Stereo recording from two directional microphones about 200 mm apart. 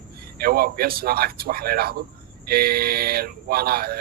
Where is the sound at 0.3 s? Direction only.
50° right (ahead or behind).